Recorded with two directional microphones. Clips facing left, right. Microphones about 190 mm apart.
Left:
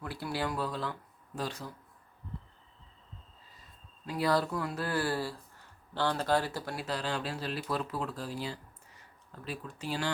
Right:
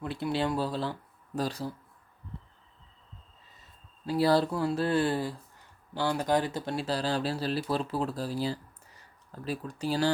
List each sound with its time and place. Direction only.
0.0 s speech: 20° right (ahead or behind)
4.0 s speech: 30° right (ahead or behind)